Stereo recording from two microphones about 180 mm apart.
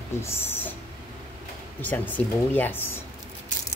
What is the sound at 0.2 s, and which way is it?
Speech, 15° left (ahead or behind).